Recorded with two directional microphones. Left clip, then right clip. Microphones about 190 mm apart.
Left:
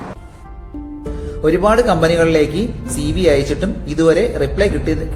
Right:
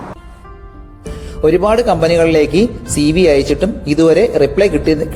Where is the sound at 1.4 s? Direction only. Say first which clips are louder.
Right 2 dB; 40° right (ahead or behind).